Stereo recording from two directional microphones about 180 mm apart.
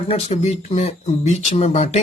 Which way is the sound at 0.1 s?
35° left (ahead or behind).